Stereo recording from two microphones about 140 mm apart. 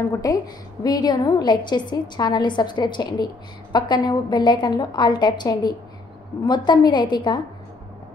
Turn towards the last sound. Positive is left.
turn(degrees=30)  # may be behind; listen again after turning